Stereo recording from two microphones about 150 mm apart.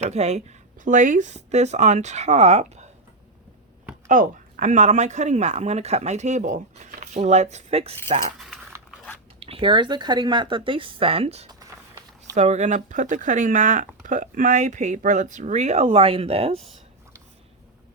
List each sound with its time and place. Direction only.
0.1 s speech: 45° right (ahead or behind)
4.0 s speech: 60° right (ahead or behind)
9.4 s speech: 40° right (ahead or behind)
11.6 s a sound: 25° right (ahead or behind)
12.4 s speech: 50° right (ahead or behind)